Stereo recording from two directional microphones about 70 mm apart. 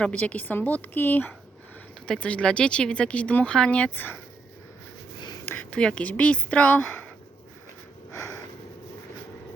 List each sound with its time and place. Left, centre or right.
0.0 s a woman's voice: left
2.0 s speech: centre
5.7 s a woman's voice: centre
8.1 s a sound: left